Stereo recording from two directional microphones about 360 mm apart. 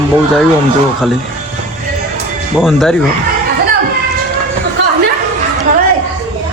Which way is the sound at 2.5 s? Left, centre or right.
Centre.